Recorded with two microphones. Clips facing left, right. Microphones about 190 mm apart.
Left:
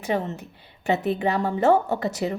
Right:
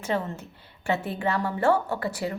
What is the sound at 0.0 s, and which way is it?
A woman's voice, 15° left (ahead or behind).